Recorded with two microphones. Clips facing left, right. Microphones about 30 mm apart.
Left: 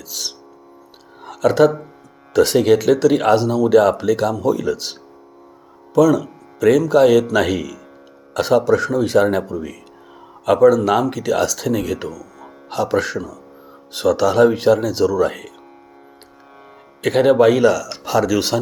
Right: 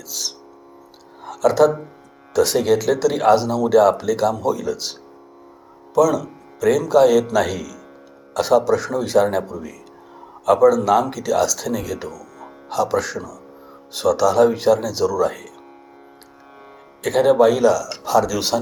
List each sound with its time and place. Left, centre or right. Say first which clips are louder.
0.1 s music: left 1 dB; centre
1.3 s speech: left 1 dB; left
6.0 s speech: left 3 dB; centre
8.4 s speech: left 1 dB; centre
14.5 s speech: left 2 dB; centre
17.0 s speech: left 1 dB; left; by 18.4 s centre